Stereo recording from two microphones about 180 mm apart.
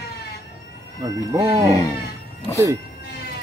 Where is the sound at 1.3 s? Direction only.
15° right (ahead or behind).